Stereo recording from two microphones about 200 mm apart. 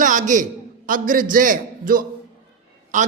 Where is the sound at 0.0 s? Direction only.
40° right (ahead or behind).